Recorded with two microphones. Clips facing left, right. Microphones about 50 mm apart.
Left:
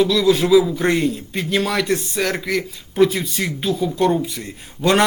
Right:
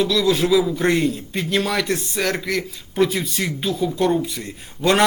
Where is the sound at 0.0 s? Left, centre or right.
Centre.